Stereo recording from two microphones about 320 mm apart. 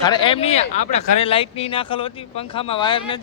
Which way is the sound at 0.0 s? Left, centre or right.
Centre.